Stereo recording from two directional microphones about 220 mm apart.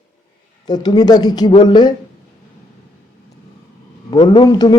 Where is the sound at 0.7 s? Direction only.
20° left (ahead or behind).